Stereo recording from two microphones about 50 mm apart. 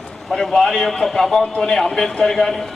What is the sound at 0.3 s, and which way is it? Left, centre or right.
A man's voice, centre.